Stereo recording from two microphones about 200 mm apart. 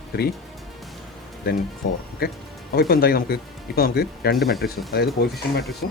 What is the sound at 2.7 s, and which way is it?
Speech, 50° left (ahead or behind).